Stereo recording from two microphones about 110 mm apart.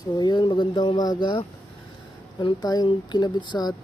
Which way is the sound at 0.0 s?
40° left (ahead or behind).